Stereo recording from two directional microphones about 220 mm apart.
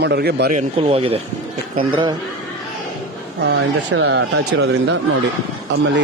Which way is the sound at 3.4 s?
50° right (ahead or behind).